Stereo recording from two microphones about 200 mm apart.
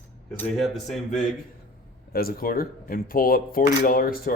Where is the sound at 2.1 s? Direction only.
50° left (ahead or behind).